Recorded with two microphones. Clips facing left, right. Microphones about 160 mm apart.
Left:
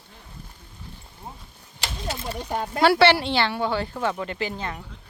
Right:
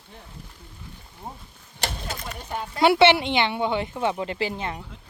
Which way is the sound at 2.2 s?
35° left (ahead or behind).